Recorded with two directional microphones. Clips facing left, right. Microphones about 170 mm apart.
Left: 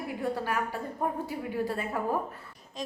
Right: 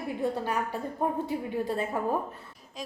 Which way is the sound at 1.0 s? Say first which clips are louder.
Right 3 dB; 25° right (ahead or behind).